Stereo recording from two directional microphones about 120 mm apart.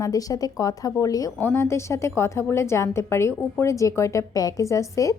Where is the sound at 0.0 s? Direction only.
30° left (ahead or behind).